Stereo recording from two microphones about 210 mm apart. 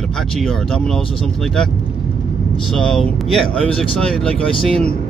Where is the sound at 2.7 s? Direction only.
5° left (ahead or behind).